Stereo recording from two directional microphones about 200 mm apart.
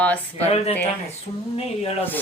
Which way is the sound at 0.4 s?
30° left (ahead or behind).